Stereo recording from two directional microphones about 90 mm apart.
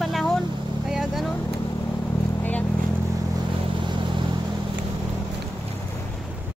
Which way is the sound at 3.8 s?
65° right (ahead or behind).